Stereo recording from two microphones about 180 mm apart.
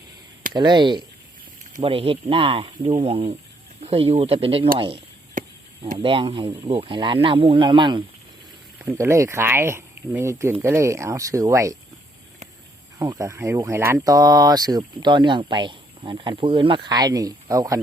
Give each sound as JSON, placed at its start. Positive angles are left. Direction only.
{"t": 0.5, "sound": "speech", "side_deg": -25}
{"t": 6.0, "sound": "speech", "side_deg": -30}
{"t": 8.8, "sound": "speech", "side_deg": -15}
{"t": 13.0, "sound": "speech", "side_deg": -20}